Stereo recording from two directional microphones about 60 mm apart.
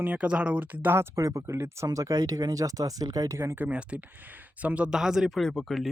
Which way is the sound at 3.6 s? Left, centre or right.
Right.